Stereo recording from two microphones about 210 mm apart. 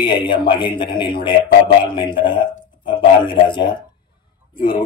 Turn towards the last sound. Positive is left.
turn(degrees=20)  # may be behind; listen again after turning